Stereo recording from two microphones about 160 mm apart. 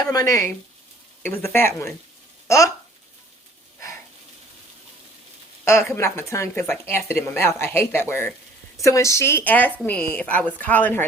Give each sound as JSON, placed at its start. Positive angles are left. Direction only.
{"t": 0.0, "sound": "speech", "side_deg": 20}
{"t": 5.6, "sound": "speech", "side_deg": 15}